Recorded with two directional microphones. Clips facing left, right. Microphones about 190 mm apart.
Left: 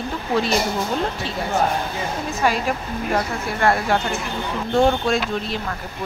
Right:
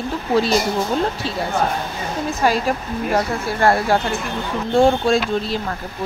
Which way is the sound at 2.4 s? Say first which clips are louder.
Right 2 dB; 35° right (ahead or behind).